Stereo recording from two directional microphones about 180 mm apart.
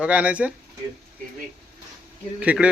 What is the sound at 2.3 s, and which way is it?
Speech, 5° right (ahead or behind).